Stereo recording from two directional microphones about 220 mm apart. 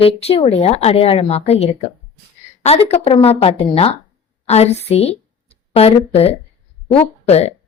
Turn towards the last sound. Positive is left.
turn(degrees=30)  # may be behind; listen again after turning